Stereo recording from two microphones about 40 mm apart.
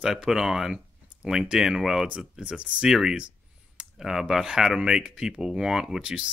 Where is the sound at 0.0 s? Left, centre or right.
Centre.